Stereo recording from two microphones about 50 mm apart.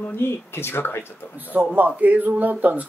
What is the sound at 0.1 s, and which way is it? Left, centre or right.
Speech, left.